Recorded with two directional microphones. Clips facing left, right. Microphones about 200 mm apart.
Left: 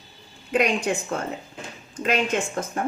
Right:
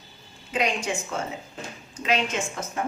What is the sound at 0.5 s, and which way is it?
A woman's voice, 55° left (ahead or behind).